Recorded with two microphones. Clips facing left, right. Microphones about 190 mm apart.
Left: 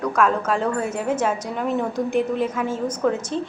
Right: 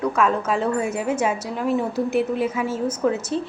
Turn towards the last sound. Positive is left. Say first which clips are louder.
# even
turn(degrees=-5)  # may be behind; listen again after turning